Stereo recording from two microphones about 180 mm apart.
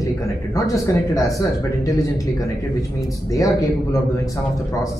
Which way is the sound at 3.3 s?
20° left (ahead or behind).